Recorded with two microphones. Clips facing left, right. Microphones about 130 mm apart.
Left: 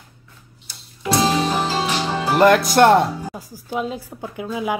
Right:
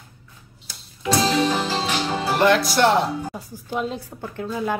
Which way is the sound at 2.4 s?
50° left (ahead or behind).